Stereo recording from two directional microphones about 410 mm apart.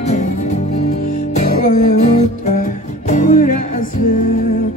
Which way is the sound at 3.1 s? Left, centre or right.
Centre.